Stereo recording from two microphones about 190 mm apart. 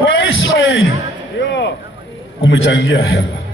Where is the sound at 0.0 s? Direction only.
90° left.